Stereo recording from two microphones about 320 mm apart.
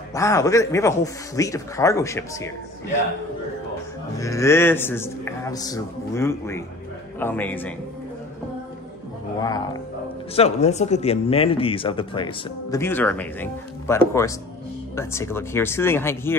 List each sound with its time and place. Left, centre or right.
0.1 s speech: centre
4.2 s a man's voice: centre
10.3 s speech: centre